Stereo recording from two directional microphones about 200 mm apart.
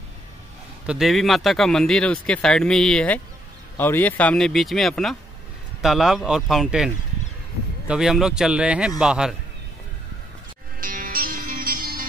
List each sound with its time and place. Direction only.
0.8 s speech: centre (ahead or behind)
7.9 s speech: 5° right (ahead or behind)
10.8 s music: 45° right (ahead or behind)